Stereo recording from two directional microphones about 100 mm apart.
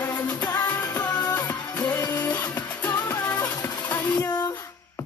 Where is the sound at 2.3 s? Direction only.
15° left (ahead or behind).